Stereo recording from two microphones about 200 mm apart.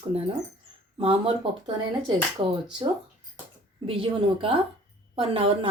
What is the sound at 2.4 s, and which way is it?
Speech, 25° right (ahead or behind).